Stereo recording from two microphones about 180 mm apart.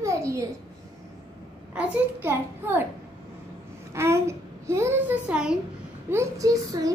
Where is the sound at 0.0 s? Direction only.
15° right (ahead or behind).